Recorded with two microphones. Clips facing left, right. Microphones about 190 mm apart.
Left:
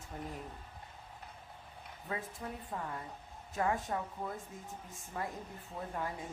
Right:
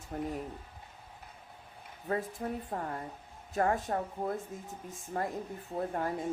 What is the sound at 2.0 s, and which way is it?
A woman's voice, 45° right (ahead or behind).